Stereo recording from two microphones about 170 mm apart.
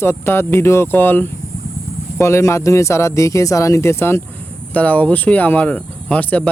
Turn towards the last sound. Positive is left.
turn(degrees=10)  # may be behind; listen again after turning